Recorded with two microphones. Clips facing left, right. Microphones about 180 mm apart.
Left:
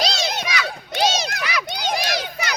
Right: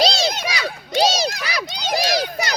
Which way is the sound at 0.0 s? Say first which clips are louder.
Right 4 dB; 30° right (ahead or behind).